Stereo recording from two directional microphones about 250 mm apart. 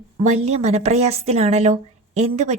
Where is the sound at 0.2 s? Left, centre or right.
Right.